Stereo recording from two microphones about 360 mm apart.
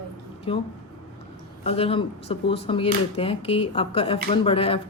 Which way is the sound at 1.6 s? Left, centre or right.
Centre.